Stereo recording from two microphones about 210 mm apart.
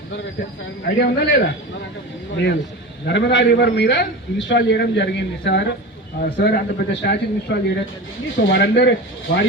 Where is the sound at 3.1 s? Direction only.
55° left (ahead or behind).